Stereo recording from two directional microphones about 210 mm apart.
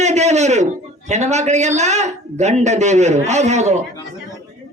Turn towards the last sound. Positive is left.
turn(degrees=-35)  # may be behind; listen again after turning